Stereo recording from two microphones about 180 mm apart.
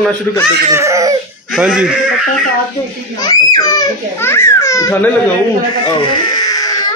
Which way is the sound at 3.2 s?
20° left (ahead or behind).